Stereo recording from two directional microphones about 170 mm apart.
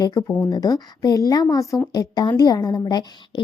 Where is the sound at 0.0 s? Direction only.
20° left (ahead or behind).